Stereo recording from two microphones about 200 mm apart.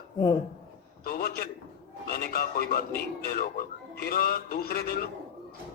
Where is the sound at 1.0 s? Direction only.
50° left (ahead or behind).